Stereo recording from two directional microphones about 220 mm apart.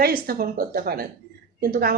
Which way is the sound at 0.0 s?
45° right (ahead or behind).